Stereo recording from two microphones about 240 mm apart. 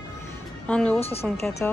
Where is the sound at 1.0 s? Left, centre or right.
Left.